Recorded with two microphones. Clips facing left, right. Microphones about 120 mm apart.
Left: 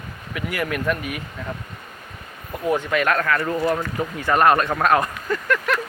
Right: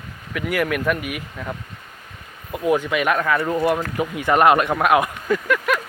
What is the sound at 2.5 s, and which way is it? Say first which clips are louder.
Speech: right 2 dB; 5° right (ahead or behind).